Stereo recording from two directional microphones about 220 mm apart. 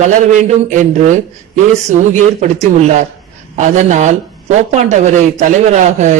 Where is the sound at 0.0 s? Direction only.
35° right (ahead or behind).